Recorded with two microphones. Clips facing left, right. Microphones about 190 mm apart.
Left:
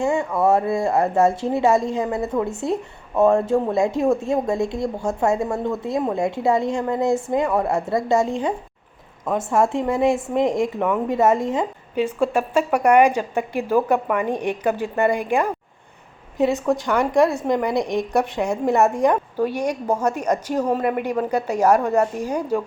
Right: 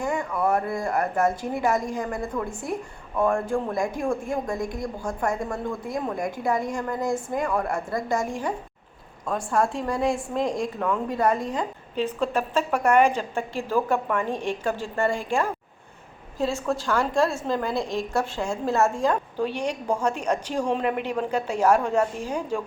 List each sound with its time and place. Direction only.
0.0 s speech: 25° left (ahead or behind)
11.9 s a woman's voice: 10° left (ahead or behind)